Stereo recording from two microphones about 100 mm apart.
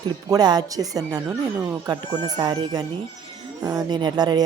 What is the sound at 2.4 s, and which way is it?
A child's voice, 40° right (ahead or behind).